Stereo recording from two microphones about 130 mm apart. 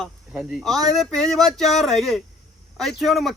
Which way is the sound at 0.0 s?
Centre (ahead or behind).